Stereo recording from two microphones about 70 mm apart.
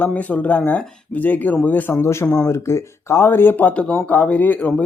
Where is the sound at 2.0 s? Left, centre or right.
Left.